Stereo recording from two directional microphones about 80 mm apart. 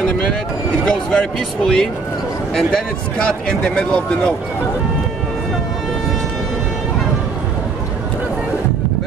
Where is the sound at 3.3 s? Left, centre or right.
Centre.